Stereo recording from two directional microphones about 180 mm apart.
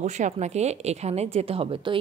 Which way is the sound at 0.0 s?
40° right (ahead or behind).